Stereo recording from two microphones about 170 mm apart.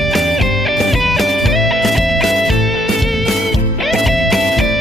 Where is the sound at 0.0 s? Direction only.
Centre (ahead or behind).